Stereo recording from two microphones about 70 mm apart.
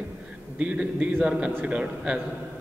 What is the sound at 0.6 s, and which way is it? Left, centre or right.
A man's voice, centre.